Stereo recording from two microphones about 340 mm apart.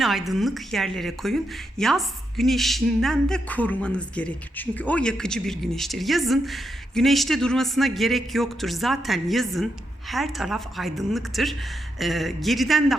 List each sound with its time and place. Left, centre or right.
0.0 s a woman's voice: centre